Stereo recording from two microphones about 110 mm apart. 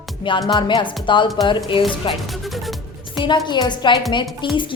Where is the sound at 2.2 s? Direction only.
Centre (ahead or behind).